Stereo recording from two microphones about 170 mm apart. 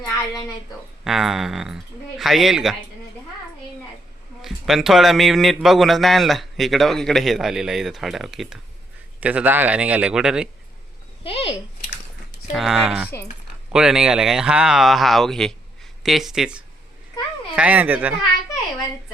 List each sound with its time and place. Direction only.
0.0 s a woman's voice: 20° left (ahead or behind)
1.0 s a man's voice: centre (ahead or behind)
4.4 s a man's voice: centre (ahead or behind)
11.2 s speech: 35° left (ahead or behind)
12.5 s a man's voice: centre (ahead or behind)